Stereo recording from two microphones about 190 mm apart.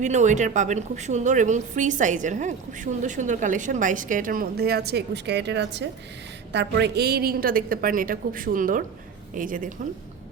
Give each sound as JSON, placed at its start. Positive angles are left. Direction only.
{"t": 0.0, "sound": "a woman's voice", "side_deg": -40}